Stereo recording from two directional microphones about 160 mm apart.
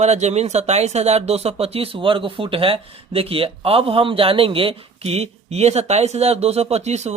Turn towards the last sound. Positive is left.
turn(degrees=-45)  # may be behind; listen again after turning